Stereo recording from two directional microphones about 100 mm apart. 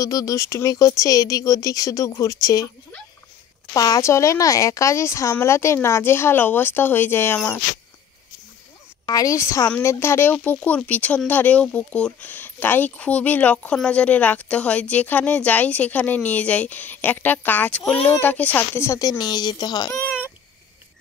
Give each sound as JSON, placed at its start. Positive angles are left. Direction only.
{"t": 0.0, "sound": "speech", "side_deg": 35}
{"t": 3.7, "sound": "a woman's voice", "side_deg": 35}
{"t": 9.0, "sound": "a woman's voice", "side_deg": 35}